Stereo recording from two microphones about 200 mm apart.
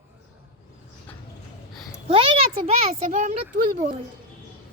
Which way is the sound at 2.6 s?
35° right (ahead or behind).